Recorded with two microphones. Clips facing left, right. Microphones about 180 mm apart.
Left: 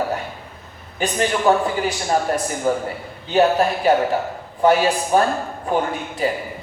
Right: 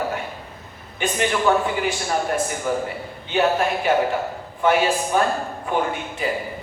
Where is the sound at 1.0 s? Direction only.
40° left (ahead or behind).